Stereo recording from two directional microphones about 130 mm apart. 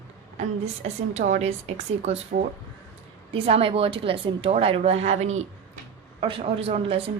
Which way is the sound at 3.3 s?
45° right (ahead or behind).